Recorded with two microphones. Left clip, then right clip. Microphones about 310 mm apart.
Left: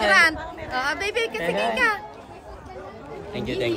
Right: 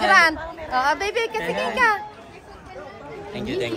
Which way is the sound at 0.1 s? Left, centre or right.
Centre.